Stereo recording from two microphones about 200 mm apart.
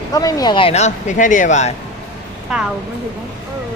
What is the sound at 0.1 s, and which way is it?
Speech, 20° left (ahead or behind).